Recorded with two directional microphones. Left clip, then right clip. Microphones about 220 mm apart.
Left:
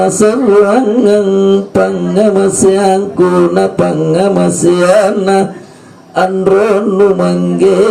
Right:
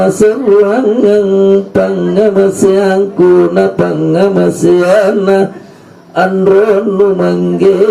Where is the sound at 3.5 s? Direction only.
50° left (ahead or behind).